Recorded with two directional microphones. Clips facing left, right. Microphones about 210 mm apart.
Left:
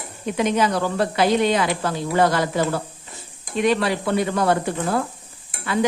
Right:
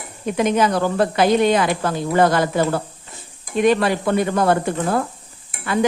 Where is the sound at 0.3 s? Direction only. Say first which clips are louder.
Right 2 dB; 50° right (ahead or behind).